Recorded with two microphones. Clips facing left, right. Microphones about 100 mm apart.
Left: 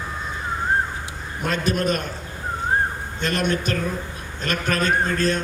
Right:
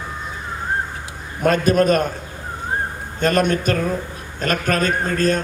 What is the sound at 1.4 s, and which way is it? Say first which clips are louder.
Speech: right 8 dB; 45° right (ahead or behind).